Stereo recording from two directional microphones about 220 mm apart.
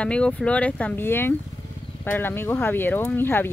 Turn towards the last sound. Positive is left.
turn(degrees=10)  # may be behind; listen again after turning